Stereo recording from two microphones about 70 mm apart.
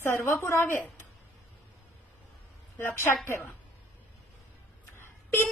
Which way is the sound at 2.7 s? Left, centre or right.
Left.